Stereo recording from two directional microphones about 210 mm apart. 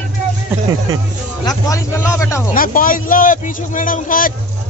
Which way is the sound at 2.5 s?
40° left (ahead or behind).